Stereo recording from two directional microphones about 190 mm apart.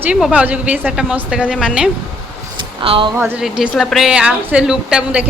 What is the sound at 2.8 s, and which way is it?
Speech, 30° right (ahead or behind).